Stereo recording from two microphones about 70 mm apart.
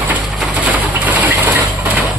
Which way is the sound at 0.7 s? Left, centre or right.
Right.